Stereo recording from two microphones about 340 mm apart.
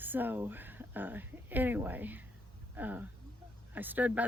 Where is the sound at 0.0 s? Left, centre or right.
Centre.